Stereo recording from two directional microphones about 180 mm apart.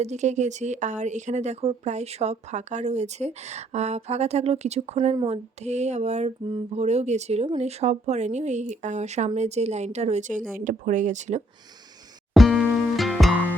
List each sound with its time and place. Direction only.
0.0 s a woman's voice: 40° right (ahead or behind)
5.1 s speech: 25° right (ahead or behind)
5.6 s a woman's voice: 40° right (ahead or behind)
12.3 s music: centre (ahead or behind)